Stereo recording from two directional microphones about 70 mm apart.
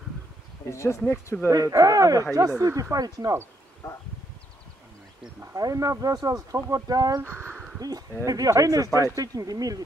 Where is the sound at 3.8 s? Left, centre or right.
Left.